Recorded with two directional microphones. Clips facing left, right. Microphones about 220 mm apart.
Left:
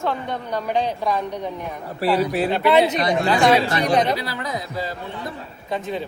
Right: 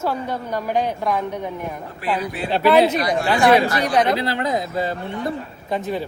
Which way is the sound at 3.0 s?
20° left (ahead or behind).